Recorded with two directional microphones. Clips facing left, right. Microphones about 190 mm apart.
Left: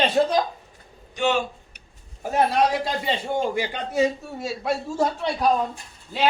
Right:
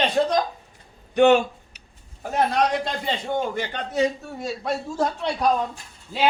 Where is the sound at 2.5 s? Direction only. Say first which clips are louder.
Left 1 dB; 5° left (ahead or behind).